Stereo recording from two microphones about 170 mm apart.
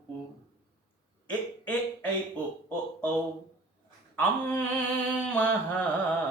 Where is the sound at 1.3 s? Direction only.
10° left (ahead or behind).